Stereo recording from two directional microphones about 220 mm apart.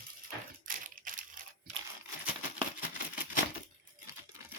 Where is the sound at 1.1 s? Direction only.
35° right (ahead or behind).